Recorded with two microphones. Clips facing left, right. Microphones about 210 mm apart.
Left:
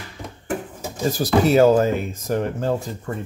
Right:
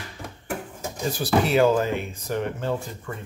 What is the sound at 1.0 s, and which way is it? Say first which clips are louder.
Speech: left 5 dB; 40° left (ahead or behind).